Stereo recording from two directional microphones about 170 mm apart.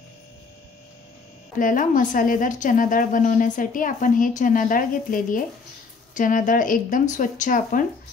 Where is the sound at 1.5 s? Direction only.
50° left (ahead or behind).